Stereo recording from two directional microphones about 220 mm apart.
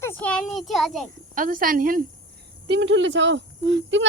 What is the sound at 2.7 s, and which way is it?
Speech, 60° right (ahead or behind).